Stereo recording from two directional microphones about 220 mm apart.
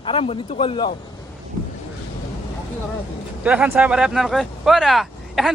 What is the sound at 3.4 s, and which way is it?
A man's voice, 5° right (ahead or behind).